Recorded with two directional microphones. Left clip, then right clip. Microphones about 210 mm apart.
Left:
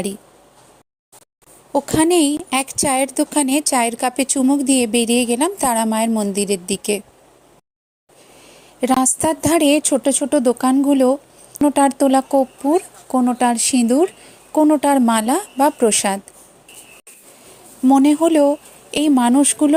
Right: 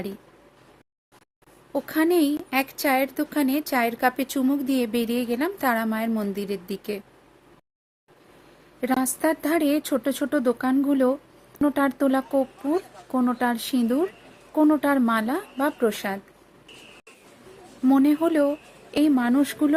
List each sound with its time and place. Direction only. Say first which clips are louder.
1.7 s a woman's voice: left 7 dB; 30° left (ahead or behind)
8.8 s a woman's voice: left 7 dB; 30° left (ahead or behind)
17.8 s a woman's voice: left 7 dB; 25° left (ahead or behind)